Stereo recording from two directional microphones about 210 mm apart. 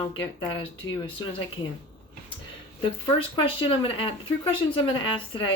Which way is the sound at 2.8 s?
25° left (ahead or behind).